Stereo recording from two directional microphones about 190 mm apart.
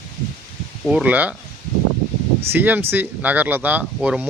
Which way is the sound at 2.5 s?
10° right (ahead or behind).